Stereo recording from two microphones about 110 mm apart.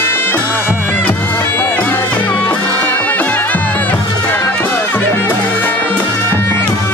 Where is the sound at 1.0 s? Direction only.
15° left (ahead or behind).